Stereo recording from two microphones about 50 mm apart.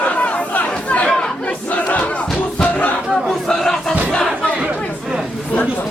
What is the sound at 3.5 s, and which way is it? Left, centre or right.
Music, centre.